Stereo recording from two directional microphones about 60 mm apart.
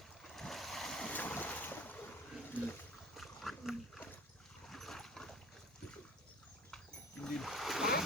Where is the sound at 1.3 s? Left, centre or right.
Left.